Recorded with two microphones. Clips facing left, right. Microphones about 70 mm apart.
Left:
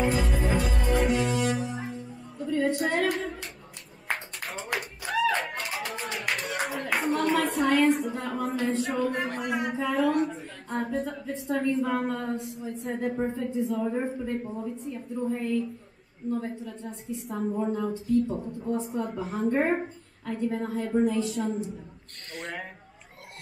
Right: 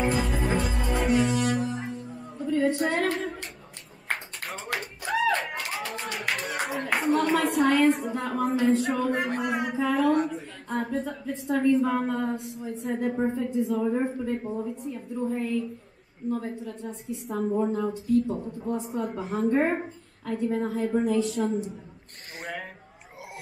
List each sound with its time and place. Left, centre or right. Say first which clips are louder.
0.0 s music: even; centre
2.3 s a sound: right 2 dB; centre
2.8 s female singing: right 1 dB; centre
4.5 s tap: even; centre
5.2 s clapping: left 1 dB; centre
9.7 s a sound: right 2 dB; centre
10.2 s a woman's voice: left 1 dB; centre
14.9 s a woman's voice: left 1 dB; centre
22.4 s a sound: right 1 dB; centre